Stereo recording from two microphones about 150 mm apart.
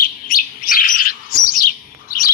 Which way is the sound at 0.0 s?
70° left (ahead or behind).